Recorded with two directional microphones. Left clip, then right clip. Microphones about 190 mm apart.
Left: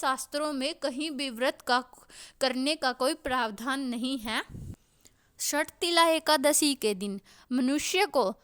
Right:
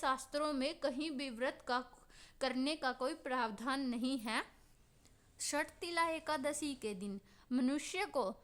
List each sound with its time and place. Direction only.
0.0 s a woman's voice: 35° left (ahead or behind)
5.6 s a woman's voice: 50° left (ahead or behind)
7.5 s a woman's voice: 35° left (ahead or behind)